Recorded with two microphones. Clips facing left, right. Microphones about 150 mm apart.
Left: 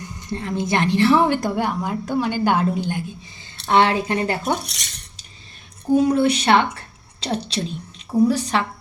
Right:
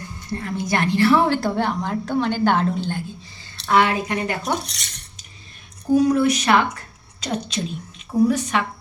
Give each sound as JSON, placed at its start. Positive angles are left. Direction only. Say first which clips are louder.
{"t": 0.3, "sound": "a woman's voice", "louder": "left 1 dB", "side_deg": 20}
{"t": 3.7, "sound": "speech", "louder": "left 1 dB", "side_deg": 30}
{"t": 5.9, "sound": "a woman's voice", "louder": "even", "side_deg": 30}